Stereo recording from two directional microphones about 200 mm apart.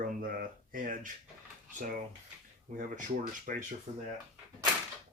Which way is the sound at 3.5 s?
40° right (ahead or behind).